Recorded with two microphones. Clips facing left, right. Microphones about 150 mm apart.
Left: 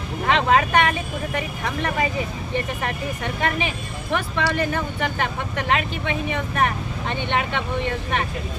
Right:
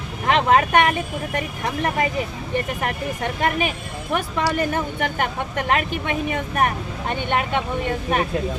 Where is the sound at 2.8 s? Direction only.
45° right (ahead or behind).